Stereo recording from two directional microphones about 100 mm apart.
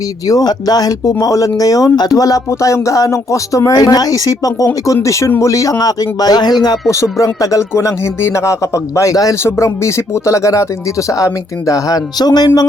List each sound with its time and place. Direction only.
0.3 s speech: 40° left (ahead or behind)